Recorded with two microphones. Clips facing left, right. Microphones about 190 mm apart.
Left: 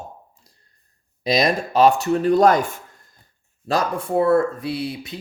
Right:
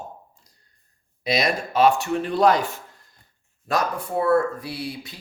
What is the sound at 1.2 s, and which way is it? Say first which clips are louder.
Speech: left 4 dB; 35° left (ahead or behind).